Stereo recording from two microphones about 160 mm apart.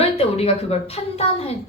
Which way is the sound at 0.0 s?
40° left (ahead or behind).